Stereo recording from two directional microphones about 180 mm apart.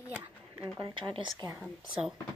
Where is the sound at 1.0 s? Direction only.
25° right (ahead or behind).